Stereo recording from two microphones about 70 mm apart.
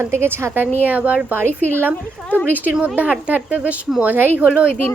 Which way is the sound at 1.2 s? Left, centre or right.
Right.